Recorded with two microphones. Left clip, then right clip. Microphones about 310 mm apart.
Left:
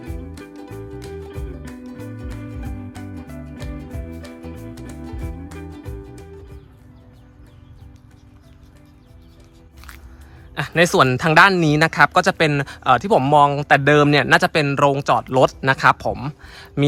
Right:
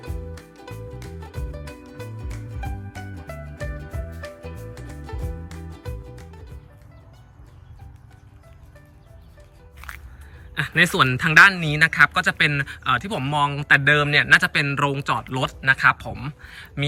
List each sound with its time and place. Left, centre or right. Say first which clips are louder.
0.0 s music: left 3 dB; centre
9.8 s music: right 4 dB; centre
10.5 s speech: left 3 dB; centre